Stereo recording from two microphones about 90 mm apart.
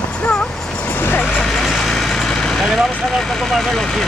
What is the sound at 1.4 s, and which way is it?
Vehicle, 5° left (ahead or behind).